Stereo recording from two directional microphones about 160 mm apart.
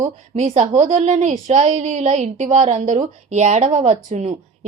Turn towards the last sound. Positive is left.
turn(degrees=-45)  # may be behind; listen again after turning